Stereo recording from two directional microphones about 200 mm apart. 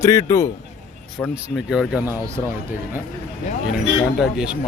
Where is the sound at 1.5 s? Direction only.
Centre (ahead or behind).